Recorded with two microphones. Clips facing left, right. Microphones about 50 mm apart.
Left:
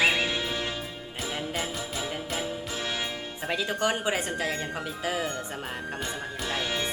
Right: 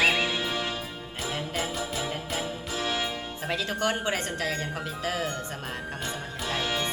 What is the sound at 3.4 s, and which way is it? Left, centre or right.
Speech, centre.